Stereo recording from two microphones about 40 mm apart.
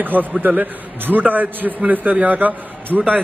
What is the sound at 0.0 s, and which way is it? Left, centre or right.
A man's voice, right.